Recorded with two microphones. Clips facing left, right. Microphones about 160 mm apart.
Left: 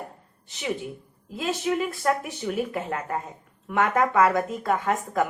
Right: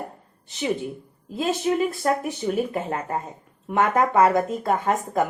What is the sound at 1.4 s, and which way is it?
Speech, 30° right (ahead or behind).